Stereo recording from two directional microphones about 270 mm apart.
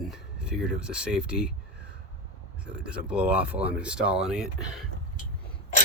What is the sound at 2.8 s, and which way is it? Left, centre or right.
Speech, centre.